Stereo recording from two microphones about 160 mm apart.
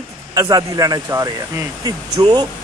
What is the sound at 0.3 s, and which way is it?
Speech, 20° right (ahead or behind).